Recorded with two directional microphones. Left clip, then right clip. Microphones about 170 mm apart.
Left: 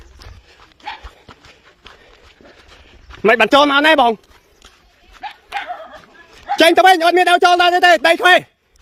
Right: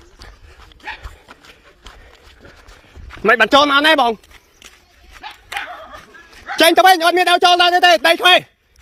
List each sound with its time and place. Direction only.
1.3 s a sound: 65° right (ahead or behind)
3.2 s speech: 40° left (ahead or behind)
6.5 s speech: 35° left (ahead or behind)